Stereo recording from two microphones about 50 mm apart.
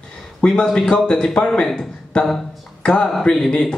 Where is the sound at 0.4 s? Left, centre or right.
Centre.